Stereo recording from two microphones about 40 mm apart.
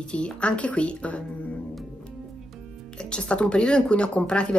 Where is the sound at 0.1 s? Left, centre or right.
Left.